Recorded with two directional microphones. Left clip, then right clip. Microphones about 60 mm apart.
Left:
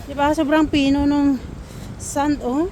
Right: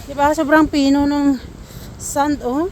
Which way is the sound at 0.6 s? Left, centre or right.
Right.